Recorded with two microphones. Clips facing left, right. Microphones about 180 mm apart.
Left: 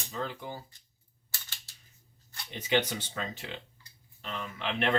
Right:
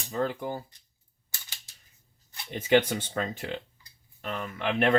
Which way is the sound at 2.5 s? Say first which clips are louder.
Right 6 dB; 50° right (ahead or behind).